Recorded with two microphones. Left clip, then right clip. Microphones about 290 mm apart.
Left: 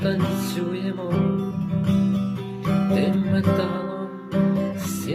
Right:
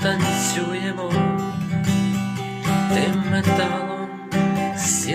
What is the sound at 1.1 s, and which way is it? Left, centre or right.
Music, centre.